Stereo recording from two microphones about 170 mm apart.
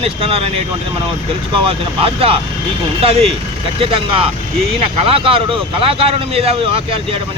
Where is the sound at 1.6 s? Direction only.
35° right (ahead or behind).